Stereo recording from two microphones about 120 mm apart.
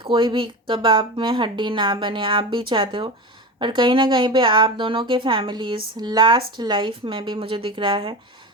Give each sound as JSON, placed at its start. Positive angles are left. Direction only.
{"t": 0.0, "sound": "speech", "side_deg": -40}